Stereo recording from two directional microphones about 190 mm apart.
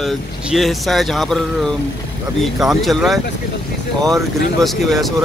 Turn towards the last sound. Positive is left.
turn(degrees=0)  # may be behind; listen again after turning